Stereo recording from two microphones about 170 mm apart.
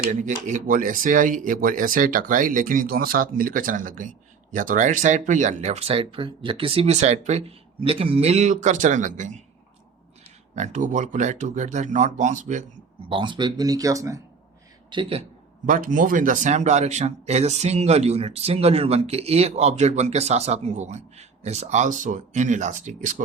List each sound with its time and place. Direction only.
0.1 s speech: 50° right (ahead or behind)
10.5 s speech: 45° right (ahead or behind)
13.1 s speech: 30° right (ahead or behind)
14.8 s speech: 30° right (ahead or behind)
15.6 s speech: 50° right (ahead or behind)